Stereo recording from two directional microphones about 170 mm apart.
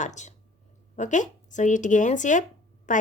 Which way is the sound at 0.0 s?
45° left (ahead or behind).